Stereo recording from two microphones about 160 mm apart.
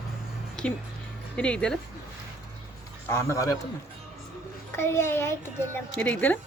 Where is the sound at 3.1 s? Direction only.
15° left (ahead or behind).